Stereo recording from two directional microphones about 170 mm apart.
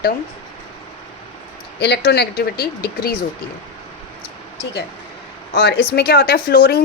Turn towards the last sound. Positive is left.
turn(degrees=65)  # may be behind; listen again after turning